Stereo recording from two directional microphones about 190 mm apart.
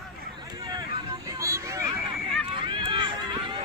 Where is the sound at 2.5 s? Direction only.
25° right (ahead or behind).